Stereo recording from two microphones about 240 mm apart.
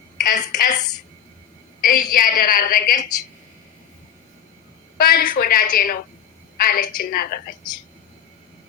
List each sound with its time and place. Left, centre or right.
0.3 s a woman's voice: left
1.8 s a woman's voice: left
4.9 s a woman's voice: left